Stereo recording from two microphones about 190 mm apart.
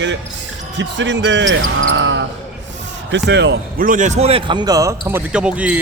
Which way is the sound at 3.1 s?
65° right (ahead or behind).